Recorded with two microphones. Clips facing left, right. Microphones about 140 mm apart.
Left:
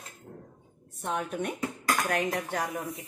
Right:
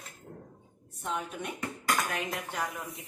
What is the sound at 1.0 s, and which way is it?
Speech, 65° left (ahead or behind).